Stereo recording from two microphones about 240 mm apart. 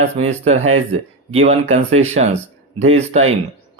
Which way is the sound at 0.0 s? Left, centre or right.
Right.